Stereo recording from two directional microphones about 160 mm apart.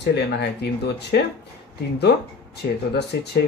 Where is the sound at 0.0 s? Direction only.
90° left.